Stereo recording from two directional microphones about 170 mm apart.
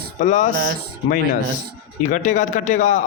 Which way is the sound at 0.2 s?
50° left (ahead or behind).